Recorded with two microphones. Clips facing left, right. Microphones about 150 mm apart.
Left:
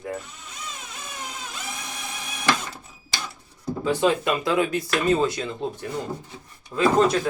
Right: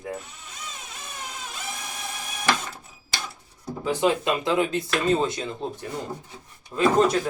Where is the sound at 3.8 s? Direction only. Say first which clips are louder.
Left 1 dB; 15° right (ahead or behind).